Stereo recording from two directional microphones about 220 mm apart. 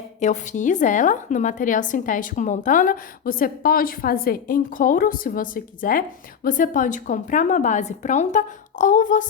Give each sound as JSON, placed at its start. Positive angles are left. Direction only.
{"t": 0.2, "sound": "a woman's voice", "side_deg": 35}